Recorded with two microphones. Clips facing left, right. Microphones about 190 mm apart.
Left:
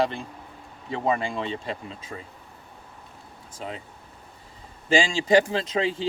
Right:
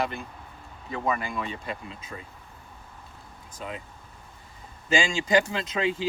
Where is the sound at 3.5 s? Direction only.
25° left (ahead or behind).